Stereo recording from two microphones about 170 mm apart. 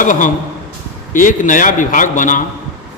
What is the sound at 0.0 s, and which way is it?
A man's voice, 50° left (ahead or behind).